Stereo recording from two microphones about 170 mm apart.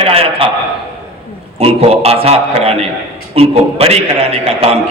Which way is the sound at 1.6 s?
35° right (ahead or behind).